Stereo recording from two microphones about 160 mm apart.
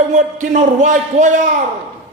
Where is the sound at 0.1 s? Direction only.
50° right (ahead or behind).